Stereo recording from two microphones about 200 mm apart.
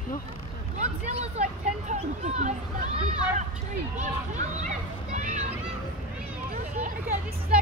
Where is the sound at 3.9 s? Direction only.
35° right (ahead or behind).